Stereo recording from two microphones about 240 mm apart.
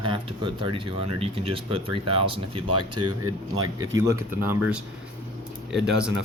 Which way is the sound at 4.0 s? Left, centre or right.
Centre.